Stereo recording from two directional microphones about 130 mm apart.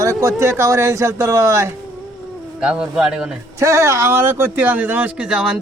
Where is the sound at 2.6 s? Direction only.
5° right (ahead or behind).